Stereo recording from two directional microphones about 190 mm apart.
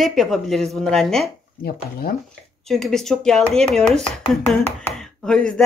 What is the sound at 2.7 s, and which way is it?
Speech, centre (ahead or behind).